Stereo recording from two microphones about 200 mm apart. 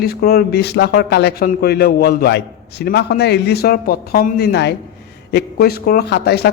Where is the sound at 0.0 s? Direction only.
50° left (ahead or behind).